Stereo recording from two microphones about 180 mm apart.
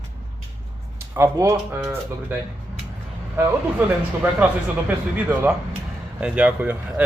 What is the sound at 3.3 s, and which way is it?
Speech, 10° right (ahead or behind).